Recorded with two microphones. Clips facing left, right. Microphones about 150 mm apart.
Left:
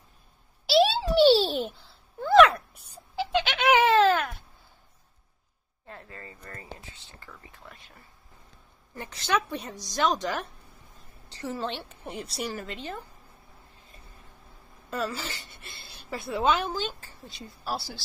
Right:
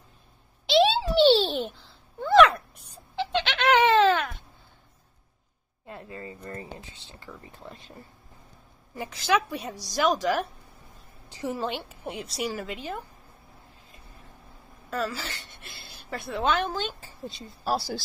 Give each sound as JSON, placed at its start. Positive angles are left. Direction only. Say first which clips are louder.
{"t": 0.7, "sound": "a sound", "louder": "right 1 dB", "side_deg": 0}
{"t": 5.9, "sound": "a sound", "louder": "right 5 dB", "side_deg": -20}
{"t": 7.5, "sound": "speech", "louder": "right 6 dB", "side_deg": -30}
{"t": 8.9, "sound": "a woman's voice", "louder": "right 3 dB", "side_deg": -5}
{"t": 14.9, "sound": "a woman's voice", "louder": "right 1 dB", "side_deg": 0}
{"t": 17.3, "sound": "speech", "louder": "right 1 dB", "side_deg": -25}
{"t": 17.6, "sound": "speech", "louder": "right 6 dB", "side_deg": -40}